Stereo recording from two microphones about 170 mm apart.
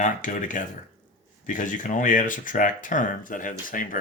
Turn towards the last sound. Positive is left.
turn(degrees=55)  # may be behind; listen again after turning